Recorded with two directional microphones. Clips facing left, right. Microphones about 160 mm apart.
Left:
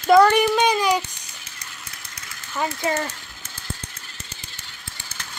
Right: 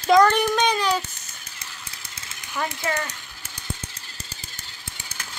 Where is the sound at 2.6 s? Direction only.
20° left (ahead or behind).